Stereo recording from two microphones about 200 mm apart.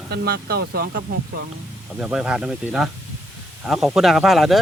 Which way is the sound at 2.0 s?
5° right (ahead or behind).